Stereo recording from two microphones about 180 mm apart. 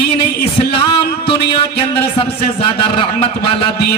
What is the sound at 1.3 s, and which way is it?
Music, 30° left (ahead or behind).